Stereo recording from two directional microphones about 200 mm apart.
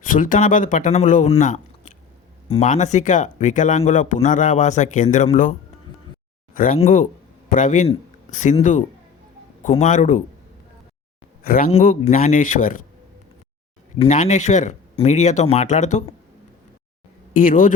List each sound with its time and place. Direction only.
0.0 s speech: 40° left (ahead or behind)
11.4 s speech: 45° left (ahead or behind)
14.0 s speech: 40° left (ahead or behind)
17.3 s speech: 45° left (ahead or behind)